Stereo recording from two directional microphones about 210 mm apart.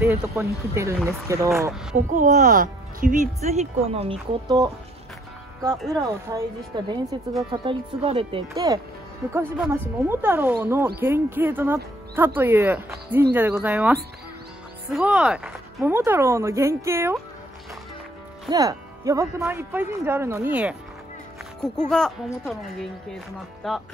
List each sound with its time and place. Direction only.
0.4 s speech: 15° right (ahead or behind)
2.0 s speech: 35° right (ahead or behind); by 4.6 s 20° right (ahead or behind)
5.9 s speech: 15° right (ahead or behind)
18.5 s speech: 15° right (ahead or behind)
21.5 s a woman's voice: 5° left (ahead or behind)